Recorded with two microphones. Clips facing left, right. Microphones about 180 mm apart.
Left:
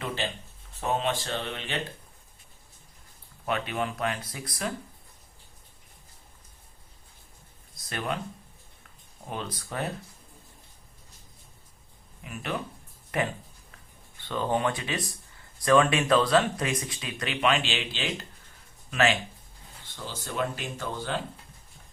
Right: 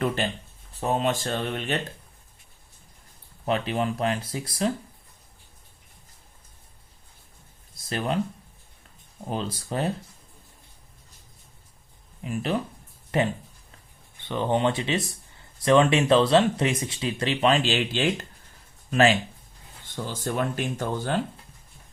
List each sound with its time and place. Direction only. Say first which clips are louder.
0.7 s speech: right 3 dB; 35° right (ahead or behind)
3.4 s speech: right 4 dB; 30° right (ahead or behind)
7.9 s speech: right 5 dB; 30° right (ahead or behind)
9.3 s speech: right 5 dB; 30° right (ahead or behind)
12.2 s speech: right 7 dB; 30° right (ahead or behind)
14.2 s speech: right 3 dB; 20° right (ahead or behind); by 18.3 s 45° right (ahead or behind)
18.9 s speech: right 5 dB; 35° right (ahead or behind)
20.1 s speech: right 3 dB; 50° right (ahead or behind)